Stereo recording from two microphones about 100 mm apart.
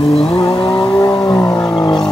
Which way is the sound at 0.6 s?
55° left (ahead or behind).